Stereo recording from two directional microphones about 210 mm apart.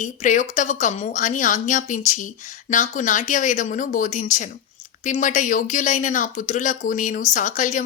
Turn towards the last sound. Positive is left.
turn(degrees=35)  # may be behind; listen again after turning